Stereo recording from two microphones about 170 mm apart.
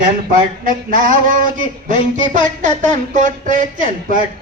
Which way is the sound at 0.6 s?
55° right (ahead or behind).